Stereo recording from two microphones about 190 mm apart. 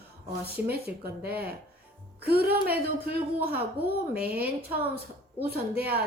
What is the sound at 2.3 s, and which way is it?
Speech, 55° right (ahead or behind).